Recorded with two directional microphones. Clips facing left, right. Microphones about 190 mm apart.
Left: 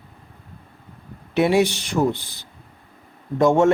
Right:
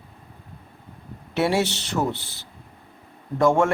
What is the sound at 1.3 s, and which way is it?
Speech, 15° left (ahead or behind).